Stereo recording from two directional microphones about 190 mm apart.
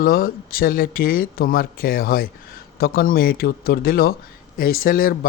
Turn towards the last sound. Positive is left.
turn(degrees=50)  # may be behind; listen again after turning